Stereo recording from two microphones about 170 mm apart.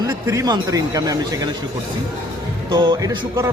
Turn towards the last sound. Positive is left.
turn(degrees=-20)  # may be behind; listen again after turning